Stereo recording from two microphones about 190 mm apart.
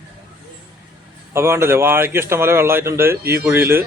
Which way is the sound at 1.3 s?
15° right (ahead or behind).